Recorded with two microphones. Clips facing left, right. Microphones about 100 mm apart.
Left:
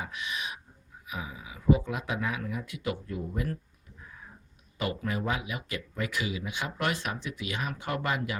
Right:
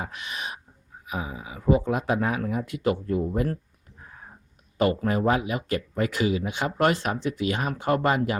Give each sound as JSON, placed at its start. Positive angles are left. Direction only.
{"t": 0.0, "sound": "speech", "side_deg": -45}
{"t": 4.8, "sound": "speech", "side_deg": -45}